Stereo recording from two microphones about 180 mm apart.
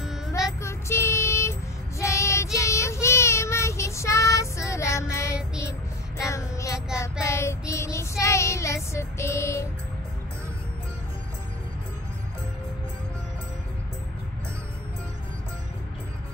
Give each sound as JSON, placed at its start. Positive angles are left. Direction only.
{"t": 0.6, "sound": "child singing", "side_deg": 15}
{"t": 5.1, "sound": "music", "side_deg": 15}
{"t": 6.1, "sound": "child singing", "side_deg": 15}